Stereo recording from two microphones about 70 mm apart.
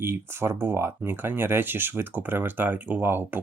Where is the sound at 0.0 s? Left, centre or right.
Right.